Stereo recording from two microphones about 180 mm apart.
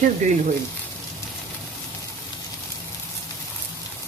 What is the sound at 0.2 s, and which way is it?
Speech, 40° right (ahead or behind).